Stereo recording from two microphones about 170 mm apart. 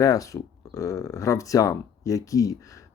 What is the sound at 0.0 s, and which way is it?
Speech, 20° left (ahead or behind).